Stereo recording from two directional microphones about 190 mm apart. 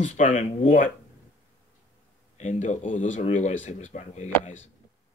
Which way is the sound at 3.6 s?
40° left (ahead or behind).